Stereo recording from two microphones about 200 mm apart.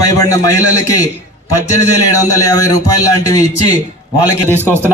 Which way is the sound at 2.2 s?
15° left (ahead or behind).